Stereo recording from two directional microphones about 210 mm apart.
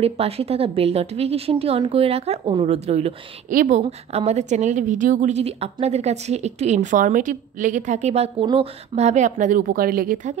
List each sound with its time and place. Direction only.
0.0 s a woman's voice: 30° right (ahead or behind)